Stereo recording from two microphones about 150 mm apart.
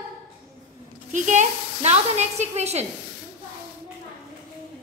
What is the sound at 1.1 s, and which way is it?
A woman's voice, 55° right (ahead or behind).